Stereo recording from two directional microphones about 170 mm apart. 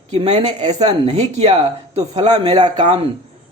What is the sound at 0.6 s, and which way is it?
Speech, 25° right (ahead or behind).